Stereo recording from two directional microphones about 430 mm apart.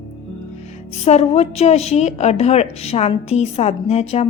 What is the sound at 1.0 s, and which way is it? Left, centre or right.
A woman's voice, centre.